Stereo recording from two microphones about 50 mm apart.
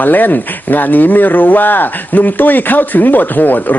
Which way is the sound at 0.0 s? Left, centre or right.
Left.